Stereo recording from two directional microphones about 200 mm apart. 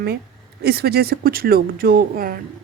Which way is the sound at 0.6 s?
50° right (ahead or behind).